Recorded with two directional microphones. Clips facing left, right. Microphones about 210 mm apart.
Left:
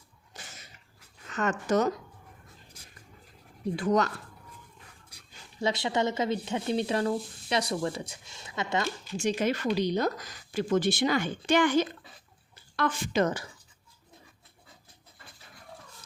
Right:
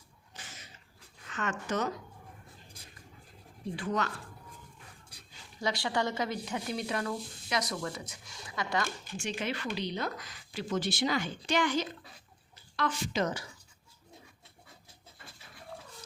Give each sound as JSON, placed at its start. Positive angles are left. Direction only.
{"t": 1.3, "sound": "speech", "side_deg": 40}
{"t": 3.8, "sound": "speech", "side_deg": 40}
{"t": 5.5, "sound": "speech", "side_deg": 25}
{"t": 9.1, "sound": "speech", "side_deg": 40}